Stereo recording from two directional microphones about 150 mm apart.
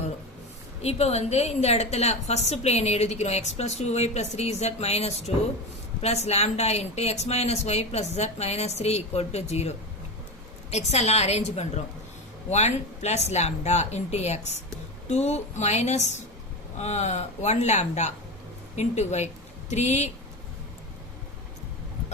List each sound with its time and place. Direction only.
0.8 s a woman's voice: 45° left (ahead or behind)